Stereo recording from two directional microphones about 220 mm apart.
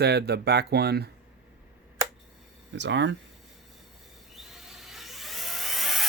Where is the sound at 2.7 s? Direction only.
55° right (ahead or behind).